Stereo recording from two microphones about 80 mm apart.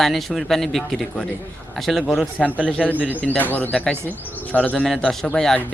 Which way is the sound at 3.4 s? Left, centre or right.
Left.